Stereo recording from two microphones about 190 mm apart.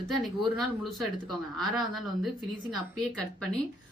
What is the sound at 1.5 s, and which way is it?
Speech, centre (ahead or behind).